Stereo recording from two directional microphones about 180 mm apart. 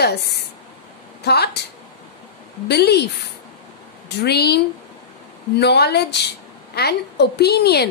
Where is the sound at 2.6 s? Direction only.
65° left (ahead or behind).